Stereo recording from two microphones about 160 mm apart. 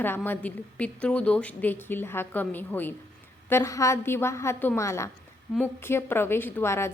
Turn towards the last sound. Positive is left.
turn(degrees=15)  # may be behind; listen again after turning